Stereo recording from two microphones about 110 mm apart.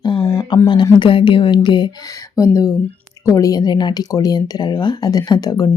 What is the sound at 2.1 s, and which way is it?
Speech, 30° left (ahead or behind).